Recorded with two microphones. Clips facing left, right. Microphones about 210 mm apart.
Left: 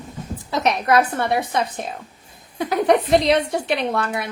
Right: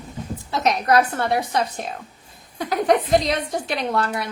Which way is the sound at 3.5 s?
60° left (ahead or behind).